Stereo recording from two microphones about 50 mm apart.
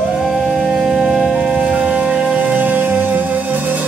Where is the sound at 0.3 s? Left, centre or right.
Centre.